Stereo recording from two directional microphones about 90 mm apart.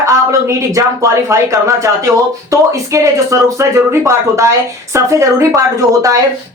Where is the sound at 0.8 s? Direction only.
35° right (ahead or behind).